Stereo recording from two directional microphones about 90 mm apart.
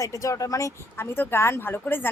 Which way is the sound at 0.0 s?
35° left (ahead or behind).